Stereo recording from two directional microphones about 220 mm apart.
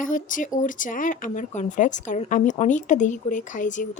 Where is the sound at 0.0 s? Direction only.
35° left (ahead or behind).